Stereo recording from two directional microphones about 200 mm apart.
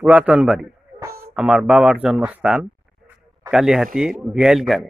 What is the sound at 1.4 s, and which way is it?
Speech, 5° right (ahead or behind).